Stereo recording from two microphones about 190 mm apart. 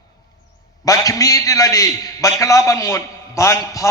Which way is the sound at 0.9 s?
20° left (ahead or behind).